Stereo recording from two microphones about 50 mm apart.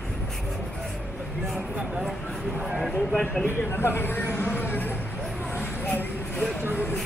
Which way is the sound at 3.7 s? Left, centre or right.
Left.